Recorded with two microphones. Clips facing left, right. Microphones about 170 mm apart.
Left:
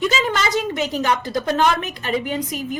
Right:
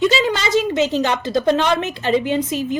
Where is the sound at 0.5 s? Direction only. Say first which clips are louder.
Right 5 dB; 25° right (ahead or behind).